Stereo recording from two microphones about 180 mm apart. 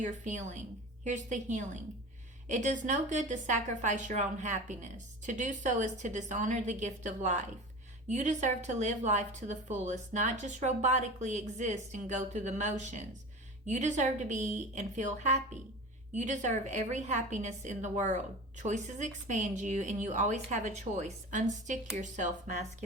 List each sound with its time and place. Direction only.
0.0 s a woman's voice: 40° right (ahead or behind)